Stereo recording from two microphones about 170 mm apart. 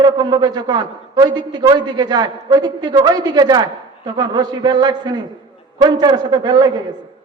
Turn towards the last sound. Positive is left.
turn(degrees=-25)  # may be behind; listen again after turning